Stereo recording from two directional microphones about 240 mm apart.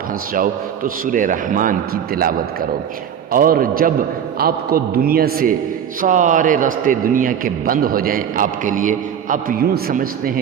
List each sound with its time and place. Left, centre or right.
1.0 s a man's voice: right
3.3 s a man's voice: right